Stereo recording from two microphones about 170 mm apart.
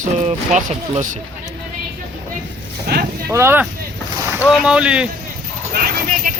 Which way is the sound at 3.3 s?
15° right (ahead or behind).